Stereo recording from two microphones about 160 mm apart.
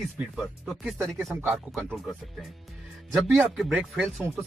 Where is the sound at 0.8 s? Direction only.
5° right (ahead or behind).